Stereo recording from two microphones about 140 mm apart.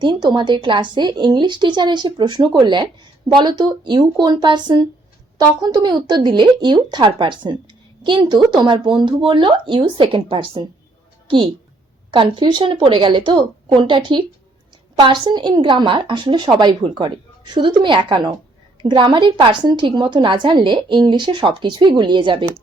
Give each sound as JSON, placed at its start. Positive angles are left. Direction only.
{"t": 0.0, "sound": "speech", "side_deg": -35}